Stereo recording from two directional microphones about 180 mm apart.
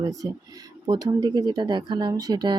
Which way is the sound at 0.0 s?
20° right (ahead or behind).